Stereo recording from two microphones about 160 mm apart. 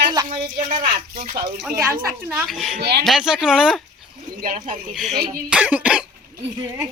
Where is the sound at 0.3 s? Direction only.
55° right (ahead or behind).